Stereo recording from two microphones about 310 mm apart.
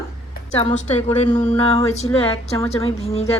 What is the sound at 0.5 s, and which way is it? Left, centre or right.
Speech, left.